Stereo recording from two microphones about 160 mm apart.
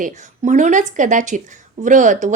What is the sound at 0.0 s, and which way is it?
Speech, 50° right (ahead or behind).